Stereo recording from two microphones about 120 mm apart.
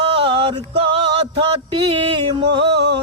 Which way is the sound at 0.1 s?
45° right (ahead or behind).